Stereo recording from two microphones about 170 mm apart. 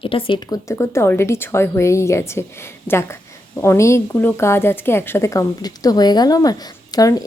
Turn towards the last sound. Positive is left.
turn(degrees=20)  # may be behind; listen again after turning